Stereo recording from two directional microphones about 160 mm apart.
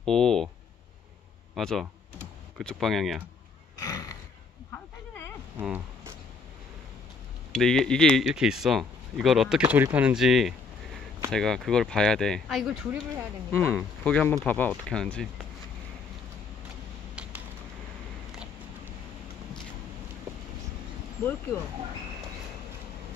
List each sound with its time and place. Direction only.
0.0 s speech: 5° left (ahead or behind)
1.5 s speech: centre (ahead or behind)
3.8 s a sound: 20° left (ahead or behind)
5.6 s speech: 10° right (ahead or behind)
7.5 s speech: 5° left (ahead or behind)
13.5 s speech: 15° left (ahead or behind)
17.1 s typing: 5° right (ahead or behind)